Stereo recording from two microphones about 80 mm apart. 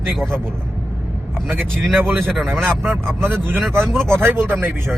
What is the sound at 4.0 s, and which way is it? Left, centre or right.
Speech, centre.